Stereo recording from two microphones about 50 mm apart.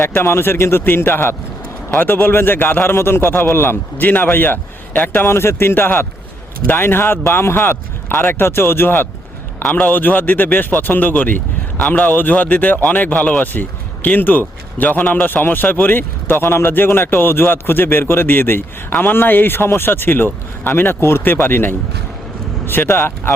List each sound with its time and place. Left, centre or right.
0.1 s a man's voice: left
5.2 s a man's voice: left